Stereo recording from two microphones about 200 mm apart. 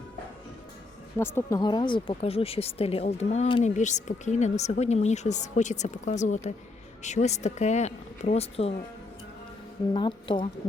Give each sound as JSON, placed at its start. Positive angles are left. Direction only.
{"t": 1.2, "sound": "speech", "side_deg": 10}
{"t": 9.9, "sound": "speech", "side_deg": 25}